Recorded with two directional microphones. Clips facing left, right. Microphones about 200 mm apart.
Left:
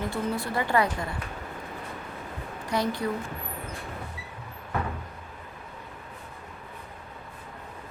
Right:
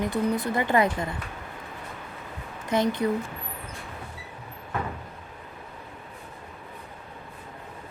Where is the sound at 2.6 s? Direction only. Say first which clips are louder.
Right 4 dB; 20° right (ahead or behind).